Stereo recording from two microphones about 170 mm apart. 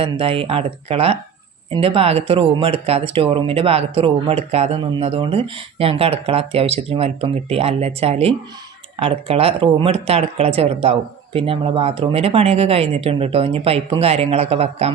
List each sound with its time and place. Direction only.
0.0 s speech: 35° right (ahead or behind)